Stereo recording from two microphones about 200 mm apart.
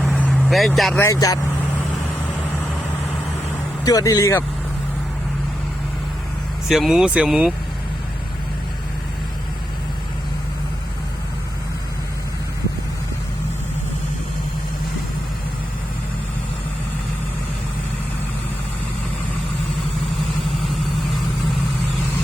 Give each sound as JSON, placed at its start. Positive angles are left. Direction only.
{"t": 0.0, "sound": "vehicle", "side_deg": 0}
{"t": 0.9, "sound": "speech", "side_deg": 15}
{"t": 3.8, "sound": "speech", "side_deg": 20}
{"t": 6.7, "sound": "speech", "side_deg": 0}